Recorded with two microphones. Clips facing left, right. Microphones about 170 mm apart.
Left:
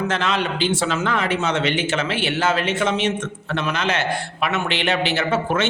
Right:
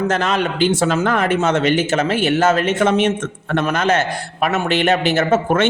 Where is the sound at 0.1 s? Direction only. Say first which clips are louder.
Right 4 dB; 45° right (ahead or behind).